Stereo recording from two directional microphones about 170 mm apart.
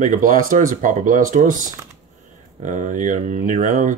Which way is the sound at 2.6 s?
45° right (ahead or behind).